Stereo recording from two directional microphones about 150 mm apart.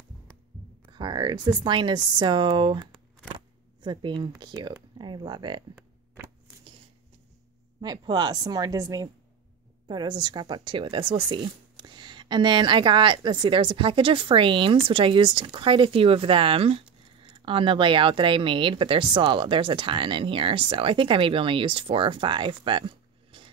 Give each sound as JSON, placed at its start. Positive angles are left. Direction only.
{"t": 0.8, "sound": "a woman's voice", "side_deg": -30}
{"t": 7.8, "sound": "a woman's voice", "side_deg": -25}